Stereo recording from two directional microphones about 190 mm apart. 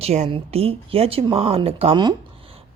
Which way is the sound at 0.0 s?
35° right (ahead or behind).